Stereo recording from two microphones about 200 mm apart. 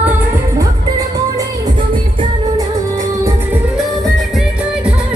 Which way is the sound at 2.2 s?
15° right (ahead or behind).